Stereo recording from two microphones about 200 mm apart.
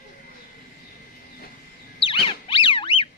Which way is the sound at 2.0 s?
25° left (ahead or behind).